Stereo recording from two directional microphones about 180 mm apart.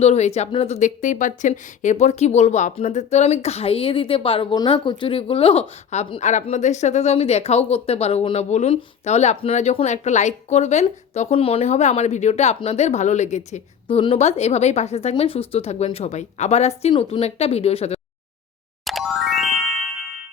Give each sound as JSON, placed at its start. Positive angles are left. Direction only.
{"t": 0.0, "sound": "a woman's voice", "side_deg": 35}
{"t": 18.9, "sound": "music", "side_deg": 0}